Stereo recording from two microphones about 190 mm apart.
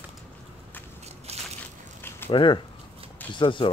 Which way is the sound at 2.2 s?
25° left (ahead or behind).